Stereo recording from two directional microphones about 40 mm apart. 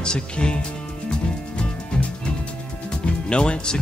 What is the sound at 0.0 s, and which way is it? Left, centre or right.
Speech, left.